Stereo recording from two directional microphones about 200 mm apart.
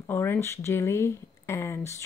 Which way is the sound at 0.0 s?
10° left (ahead or behind).